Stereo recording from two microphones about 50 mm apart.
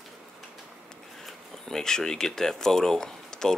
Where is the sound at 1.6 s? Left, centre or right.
Centre.